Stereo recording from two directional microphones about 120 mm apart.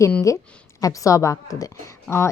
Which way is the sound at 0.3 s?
25° left (ahead or behind).